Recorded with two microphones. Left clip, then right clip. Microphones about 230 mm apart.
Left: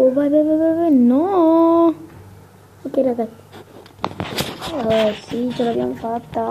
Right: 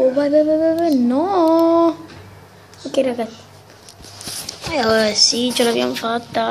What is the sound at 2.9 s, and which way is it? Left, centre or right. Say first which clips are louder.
Speech: even; centre.